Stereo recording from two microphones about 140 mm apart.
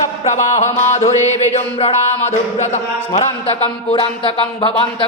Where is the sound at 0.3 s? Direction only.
55° left (ahead or behind).